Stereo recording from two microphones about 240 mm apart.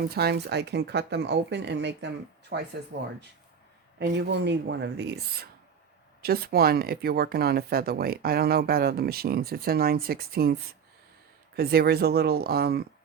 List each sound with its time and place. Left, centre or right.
0.1 s speech: right